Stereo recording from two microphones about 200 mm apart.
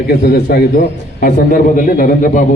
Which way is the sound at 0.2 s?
55° left (ahead or behind).